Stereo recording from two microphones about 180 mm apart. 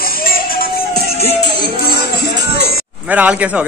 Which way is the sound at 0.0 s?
55° left (ahead or behind).